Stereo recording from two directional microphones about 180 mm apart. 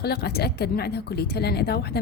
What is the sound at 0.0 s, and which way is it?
Speech, 60° left (ahead or behind).